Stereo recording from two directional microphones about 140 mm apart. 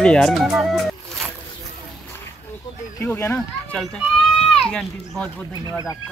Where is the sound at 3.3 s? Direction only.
5° left (ahead or behind).